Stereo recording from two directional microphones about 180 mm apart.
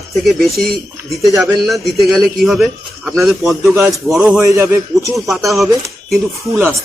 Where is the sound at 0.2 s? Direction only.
Centre (ahead or behind).